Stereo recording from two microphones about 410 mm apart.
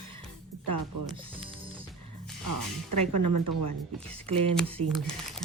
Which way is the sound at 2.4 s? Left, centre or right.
Right.